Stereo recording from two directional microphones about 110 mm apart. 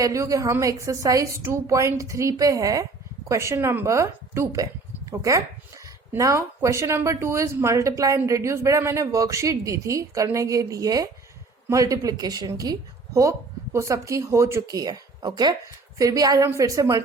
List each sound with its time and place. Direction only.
0.0 s speech: 30° right (ahead or behind)
13.7 s speech: 30° right (ahead or behind)
14.8 s speech: 35° right (ahead or behind)